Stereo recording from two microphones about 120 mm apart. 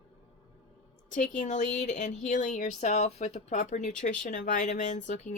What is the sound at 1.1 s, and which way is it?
Speech, 90° left.